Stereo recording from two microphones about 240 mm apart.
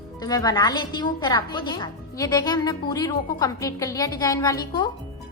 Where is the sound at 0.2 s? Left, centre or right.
Centre.